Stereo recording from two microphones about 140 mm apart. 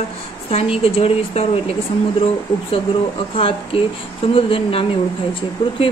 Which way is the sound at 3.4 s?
40° left (ahead or behind).